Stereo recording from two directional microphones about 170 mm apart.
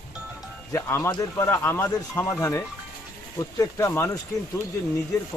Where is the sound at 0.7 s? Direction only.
15° left (ahead or behind).